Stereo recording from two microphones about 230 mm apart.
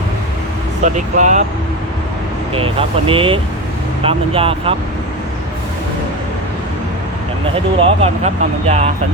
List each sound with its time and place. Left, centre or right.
0.9 s speech: right
2.6 s speech: right
7.8 s speech: right